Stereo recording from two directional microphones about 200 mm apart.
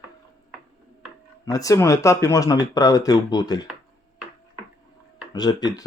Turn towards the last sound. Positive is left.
turn(degrees=20)  # may be behind; listen again after turning